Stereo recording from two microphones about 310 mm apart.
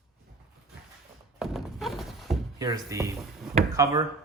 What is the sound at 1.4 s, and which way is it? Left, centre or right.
Thunk, centre.